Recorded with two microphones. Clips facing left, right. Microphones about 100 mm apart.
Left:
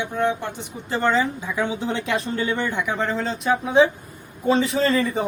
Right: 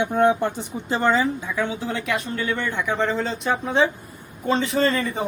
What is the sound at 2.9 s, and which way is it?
Speech, centre (ahead or behind).